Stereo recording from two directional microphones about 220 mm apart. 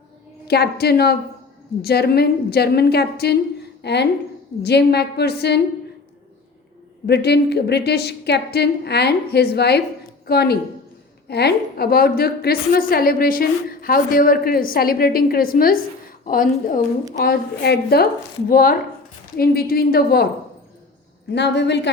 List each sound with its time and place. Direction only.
0.4 s a woman's voice: 45° left (ahead or behind)
7.1 s a woman's voice: 50° left (ahead or behind)
21.2 s a woman's voice: 50° left (ahead or behind)